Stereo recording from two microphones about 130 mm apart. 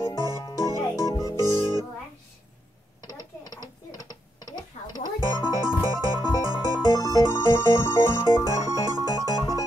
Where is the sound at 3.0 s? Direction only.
30° left (ahead or behind).